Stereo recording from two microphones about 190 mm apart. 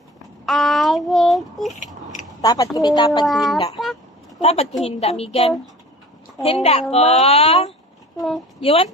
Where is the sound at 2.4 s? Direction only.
20° left (ahead or behind).